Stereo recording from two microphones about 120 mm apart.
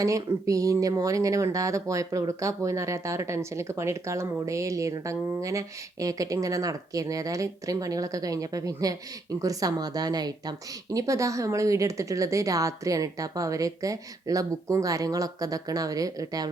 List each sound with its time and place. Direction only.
0.0 s speech: 30° right (ahead or behind)